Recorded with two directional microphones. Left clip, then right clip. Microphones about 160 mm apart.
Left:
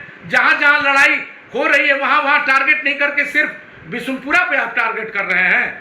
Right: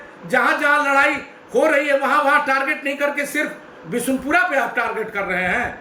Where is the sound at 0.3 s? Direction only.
20° right (ahead or behind).